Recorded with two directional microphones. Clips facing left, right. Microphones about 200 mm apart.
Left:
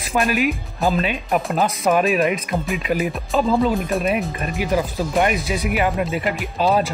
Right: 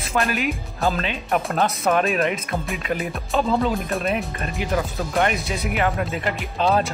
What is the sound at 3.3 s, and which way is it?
Speech, centre (ahead or behind).